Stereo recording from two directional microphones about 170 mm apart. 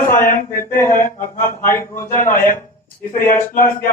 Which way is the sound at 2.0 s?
50° left (ahead or behind).